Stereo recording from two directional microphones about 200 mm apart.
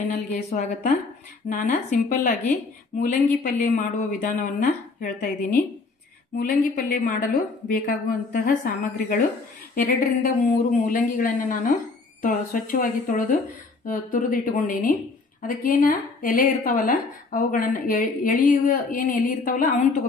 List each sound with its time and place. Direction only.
0.1 s a woman's voice: 35° left (ahead or behind)